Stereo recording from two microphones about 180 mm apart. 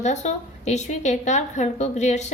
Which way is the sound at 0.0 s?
40° left (ahead or behind).